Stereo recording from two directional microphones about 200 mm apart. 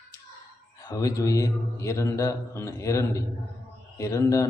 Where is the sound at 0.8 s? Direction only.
20° left (ahead or behind).